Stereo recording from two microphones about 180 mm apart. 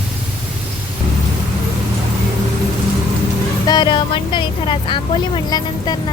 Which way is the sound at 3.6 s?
25° left (ahead or behind).